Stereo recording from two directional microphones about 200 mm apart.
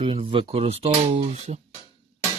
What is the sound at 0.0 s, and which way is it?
Speech, 25° right (ahead or behind).